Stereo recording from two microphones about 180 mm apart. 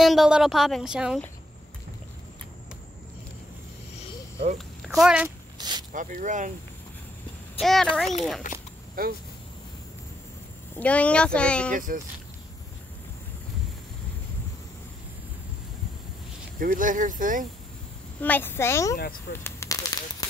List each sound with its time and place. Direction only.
0.0 s a woman's voice: centre (ahead or behind)
4.6 s speech: centre (ahead or behind)
5.6 s snake: 25° right (ahead or behind)
5.9 s speech: 45° right (ahead or behind)
7.6 s a woman's voice: centre (ahead or behind)
8.5 s speech: 45° left (ahead or behind)
9.0 s speech: 55° right (ahead or behind)
10.8 s speech: 10° left (ahead or behind)
11.7 s speech: 50° right (ahead or behind)
16.5 s speech: 50° right (ahead or behind)
18.2 s speech: 10° left (ahead or behind)
19.3 s a sound: 15° left (ahead or behind)